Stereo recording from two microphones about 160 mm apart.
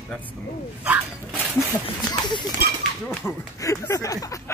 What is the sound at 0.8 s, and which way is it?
Speech, 10° right (ahead or behind).